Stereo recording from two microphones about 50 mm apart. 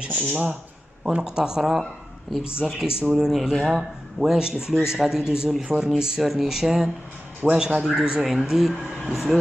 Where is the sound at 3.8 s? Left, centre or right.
Centre.